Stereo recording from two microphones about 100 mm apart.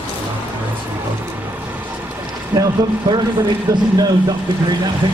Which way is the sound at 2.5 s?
50° right (ahead or behind).